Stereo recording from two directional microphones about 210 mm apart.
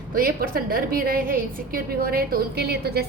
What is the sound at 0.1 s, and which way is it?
A woman's voice, 45° right (ahead or behind).